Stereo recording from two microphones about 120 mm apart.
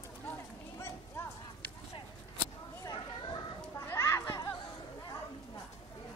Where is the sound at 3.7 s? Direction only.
25° left (ahead or behind).